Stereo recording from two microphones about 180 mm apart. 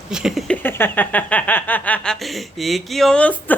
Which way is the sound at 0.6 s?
10° left (ahead or behind).